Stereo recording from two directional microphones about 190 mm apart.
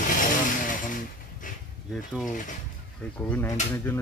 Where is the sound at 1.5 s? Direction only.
45° left (ahead or behind).